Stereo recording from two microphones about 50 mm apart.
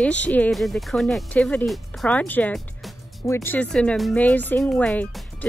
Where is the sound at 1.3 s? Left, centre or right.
Left.